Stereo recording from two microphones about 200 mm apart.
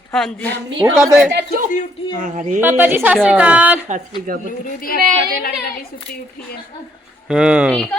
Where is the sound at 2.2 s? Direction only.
40° right (ahead or behind).